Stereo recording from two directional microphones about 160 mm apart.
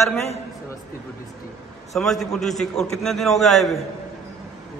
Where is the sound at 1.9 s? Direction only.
Centre (ahead or behind).